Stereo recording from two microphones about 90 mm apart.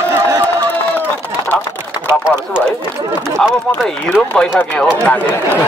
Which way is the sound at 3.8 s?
15° left (ahead or behind).